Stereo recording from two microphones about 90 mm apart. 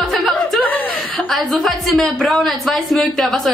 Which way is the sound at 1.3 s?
5° left (ahead or behind).